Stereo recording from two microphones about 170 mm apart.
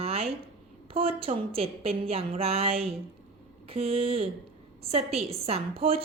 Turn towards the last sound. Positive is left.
turn(degrees=-35)  # may be behind; listen again after turning